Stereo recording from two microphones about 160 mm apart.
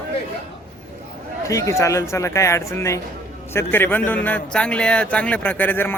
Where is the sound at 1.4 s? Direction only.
20° left (ahead or behind).